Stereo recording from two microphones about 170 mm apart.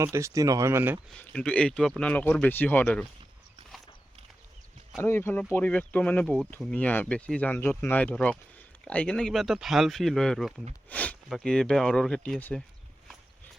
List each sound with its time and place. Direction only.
0.0 s speech: 15° right (ahead or behind)
1.1 s speech: 5° left (ahead or behind)
5.0 s speech: 15° left (ahead or behind)
10.8 s a sound: 10° left (ahead or behind)
11.3 s speech: 5° left (ahead or behind)